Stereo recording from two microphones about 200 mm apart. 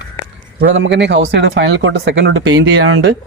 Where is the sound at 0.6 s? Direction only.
65° right (ahead or behind).